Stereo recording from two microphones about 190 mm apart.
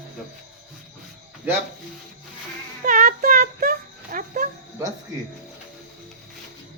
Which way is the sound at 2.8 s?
45° right (ahead or behind).